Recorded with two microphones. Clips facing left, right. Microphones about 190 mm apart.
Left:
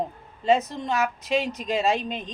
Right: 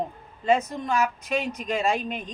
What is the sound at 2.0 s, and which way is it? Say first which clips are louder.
Speech: even; centre (ahead or behind).